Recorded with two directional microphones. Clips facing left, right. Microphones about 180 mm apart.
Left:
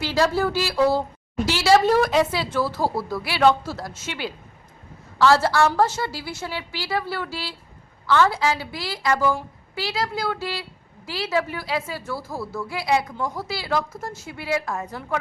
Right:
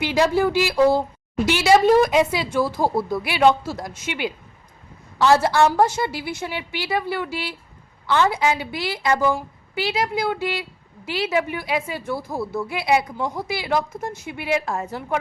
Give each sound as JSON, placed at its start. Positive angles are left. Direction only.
{"t": 0.0, "sound": "a woman's voice", "side_deg": -15}